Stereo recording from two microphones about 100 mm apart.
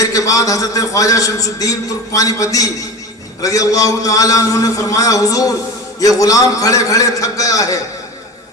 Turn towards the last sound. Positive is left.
turn(degrees=35)  # may be behind; listen again after turning